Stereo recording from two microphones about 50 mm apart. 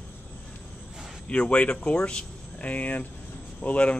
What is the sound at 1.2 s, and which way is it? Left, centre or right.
Speech, left.